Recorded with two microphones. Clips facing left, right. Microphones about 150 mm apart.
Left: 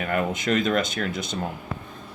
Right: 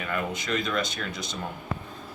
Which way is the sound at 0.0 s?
50° left (ahead or behind).